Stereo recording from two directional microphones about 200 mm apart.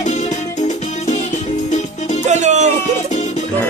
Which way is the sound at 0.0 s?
35° left (ahead or behind).